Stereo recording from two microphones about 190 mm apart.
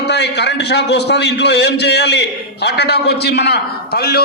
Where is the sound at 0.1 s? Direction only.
65° left (ahead or behind).